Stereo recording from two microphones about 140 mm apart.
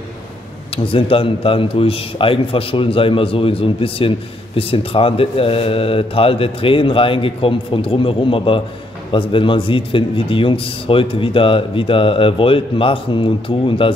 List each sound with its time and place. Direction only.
0.8 s a man's voice: 40° left (ahead or behind)